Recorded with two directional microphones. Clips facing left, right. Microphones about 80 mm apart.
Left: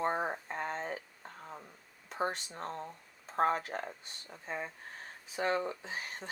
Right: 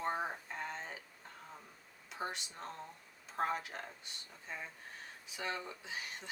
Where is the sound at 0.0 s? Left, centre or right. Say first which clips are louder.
Left 5 dB; left.